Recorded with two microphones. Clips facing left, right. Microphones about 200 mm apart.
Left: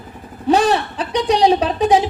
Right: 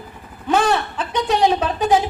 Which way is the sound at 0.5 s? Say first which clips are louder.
Right 1 dB; 20° left (ahead or behind).